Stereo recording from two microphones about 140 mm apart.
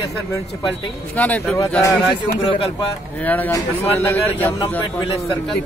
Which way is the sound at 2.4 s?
45° left (ahead or behind).